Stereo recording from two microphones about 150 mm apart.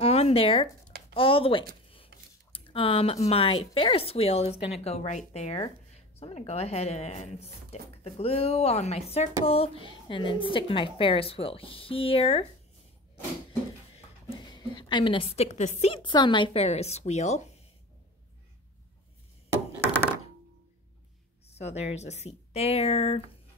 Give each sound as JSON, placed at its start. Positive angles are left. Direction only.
{"t": 0.0, "sound": "a sound", "side_deg": 40}
{"t": 1.1, "sound": "speech", "side_deg": 35}
{"t": 13.5, "sound": "speech", "side_deg": 30}
{"t": 21.5, "sound": "speech", "side_deg": 45}